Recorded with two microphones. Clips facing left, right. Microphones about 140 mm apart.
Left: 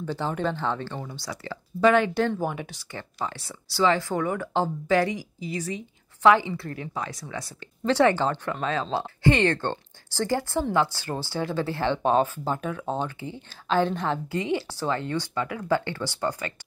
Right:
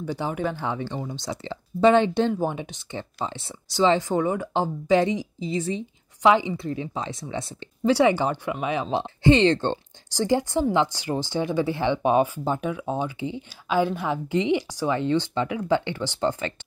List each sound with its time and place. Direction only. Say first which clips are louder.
0.0 s speech: right 1 dB; 10° right (ahead or behind)
7.8 s speech: right 1 dB; 10° right (ahead or behind)